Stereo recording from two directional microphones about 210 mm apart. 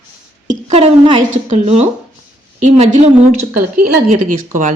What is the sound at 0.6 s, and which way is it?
A woman's voice, 30° right (ahead or behind).